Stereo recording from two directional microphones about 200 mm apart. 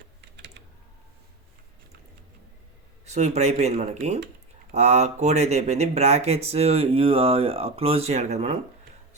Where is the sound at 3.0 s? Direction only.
35° right (ahead or behind).